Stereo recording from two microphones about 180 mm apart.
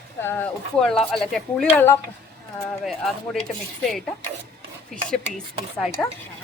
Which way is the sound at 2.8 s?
Centre (ahead or behind).